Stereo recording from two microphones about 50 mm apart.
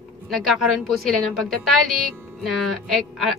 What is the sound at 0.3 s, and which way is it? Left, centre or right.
A woman's voice, centre.